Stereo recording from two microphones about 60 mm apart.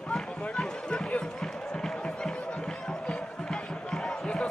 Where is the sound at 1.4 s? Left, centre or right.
Centre.